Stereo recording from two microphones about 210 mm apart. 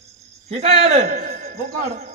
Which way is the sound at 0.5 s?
30° right (ahead or behind).